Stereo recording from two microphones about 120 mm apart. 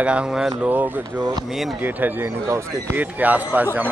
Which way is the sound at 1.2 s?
35° right (ahead or behind).